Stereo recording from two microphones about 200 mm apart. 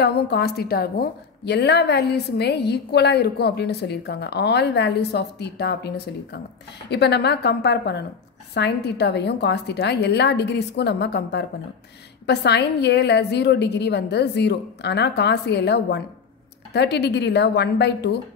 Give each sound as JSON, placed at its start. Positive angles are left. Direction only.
{"t": 0.0, "sound": "a woman's voice", "side_deg": 55}